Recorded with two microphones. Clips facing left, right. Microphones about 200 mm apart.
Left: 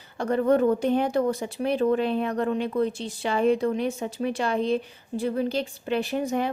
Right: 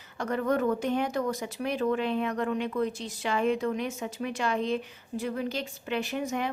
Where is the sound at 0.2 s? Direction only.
30° left (ahead or behind).